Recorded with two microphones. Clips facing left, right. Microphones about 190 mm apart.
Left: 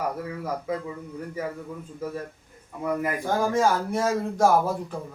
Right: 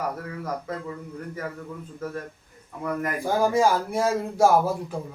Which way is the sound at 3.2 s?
10° right (ahead or behind).